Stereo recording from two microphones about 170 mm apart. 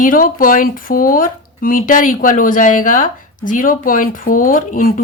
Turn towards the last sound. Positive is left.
turn(degrees=55)  # may be behind; listen again after turning